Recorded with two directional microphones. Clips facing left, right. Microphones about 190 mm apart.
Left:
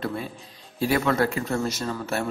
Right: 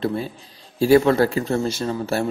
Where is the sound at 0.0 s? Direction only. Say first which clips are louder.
Right 6 dB; 30° right (ahead or behind).